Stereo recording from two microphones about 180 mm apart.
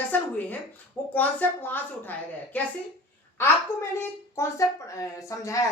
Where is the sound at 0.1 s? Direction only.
10° left (ahead or behind).